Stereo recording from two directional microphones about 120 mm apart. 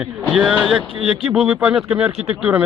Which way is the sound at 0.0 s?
5° right (ahead or behind).